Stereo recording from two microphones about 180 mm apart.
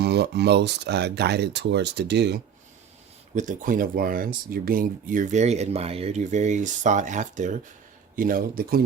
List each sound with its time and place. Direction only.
0.0 s speech: 65° right (ahead or behind)
3.3 s speech: 45° right (ahead or behind)